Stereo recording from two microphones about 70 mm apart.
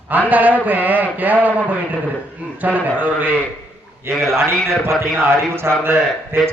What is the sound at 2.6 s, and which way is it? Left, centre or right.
Speech, right.